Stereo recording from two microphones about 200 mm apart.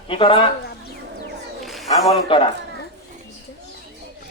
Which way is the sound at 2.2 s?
25° left (ahead or behind).